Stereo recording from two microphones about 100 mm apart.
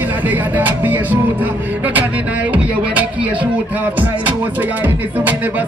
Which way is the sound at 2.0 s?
15° right (ahead or behind).